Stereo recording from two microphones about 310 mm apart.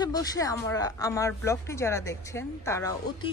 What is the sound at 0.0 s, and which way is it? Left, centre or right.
Speech, centre.